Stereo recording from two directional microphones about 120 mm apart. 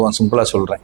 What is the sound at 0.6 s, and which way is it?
Speech, 20° right (ahead or behind).